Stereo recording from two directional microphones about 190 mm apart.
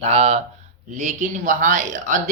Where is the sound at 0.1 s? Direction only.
35° right (ahead or behind).